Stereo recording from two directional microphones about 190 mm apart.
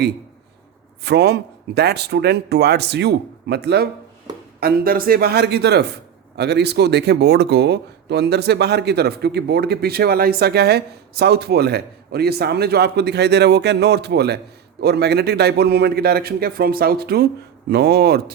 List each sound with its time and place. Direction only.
1.0 s speech: 60° right (ahead or behind)
4.6 s speech: 50° right (ahead or behind)